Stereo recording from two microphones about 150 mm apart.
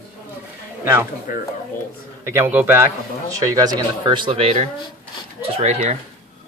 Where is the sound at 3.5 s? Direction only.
25° right (ahead or behind); by 5.9 s 50° right (ahead or behind).